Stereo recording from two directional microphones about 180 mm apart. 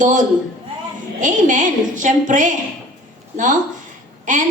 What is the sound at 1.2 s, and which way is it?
A woman's voice, 45° right (ahead or behind).